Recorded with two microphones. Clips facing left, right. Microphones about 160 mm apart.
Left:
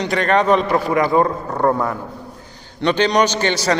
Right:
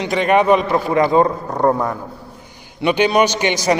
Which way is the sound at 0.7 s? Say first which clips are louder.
Right 1 dB; 20° right (ahead or behind).